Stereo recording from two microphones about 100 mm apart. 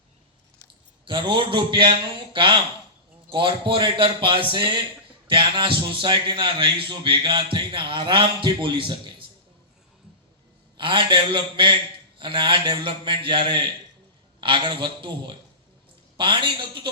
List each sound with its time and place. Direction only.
1.0 s a man's voice: 55° right (ahead or behind)
10.8 s a man's voice: 55° right (ahead or behind)